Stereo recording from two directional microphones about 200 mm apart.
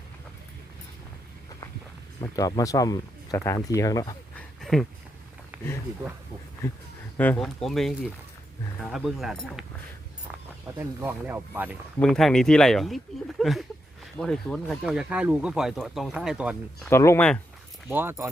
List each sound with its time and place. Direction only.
2.2 s speech: 15° left (ahead or behind)
4.4 s a sound: centre (ahead or behind)
6.6 s speech: 15° left (ahead or behind)
10.8 s speech: 10° right (ahead or behind)
11.9 s speech: 5° left (ahead or behind)
16.9 s speech: 15° left (ahead or behind)
17.8 s speech: 10° right (ahead or behind)